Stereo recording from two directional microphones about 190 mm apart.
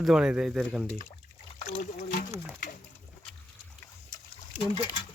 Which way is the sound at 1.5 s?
40° left (ahead or behind).